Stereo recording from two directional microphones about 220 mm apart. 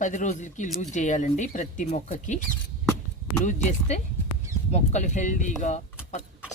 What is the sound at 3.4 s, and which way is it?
Speech, 35° left (ahead or behind).